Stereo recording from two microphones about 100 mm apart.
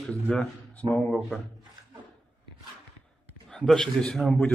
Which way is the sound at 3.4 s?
5° left (ahead or behind).